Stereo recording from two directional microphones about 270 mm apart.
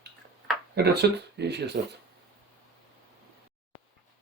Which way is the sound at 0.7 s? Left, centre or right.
Right.